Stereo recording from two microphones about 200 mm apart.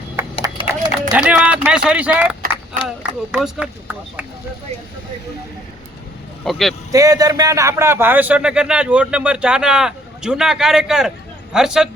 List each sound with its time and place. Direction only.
0.4 s a sound: 20° right (ahead or behind)
1.1 s speech: 5° right (ahead or behind)
6.4 s speech: centre (ahead or behind)
6.9 s speech: 15° right (ahead or behind)